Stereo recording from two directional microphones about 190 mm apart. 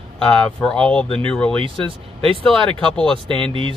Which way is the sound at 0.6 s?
5° left (ahead or behind).